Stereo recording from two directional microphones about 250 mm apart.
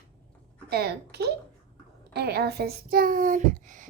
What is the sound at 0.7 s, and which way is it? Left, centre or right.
A child's voice, right.